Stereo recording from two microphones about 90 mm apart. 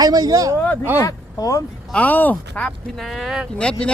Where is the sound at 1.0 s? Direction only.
40° left (ahead or behind).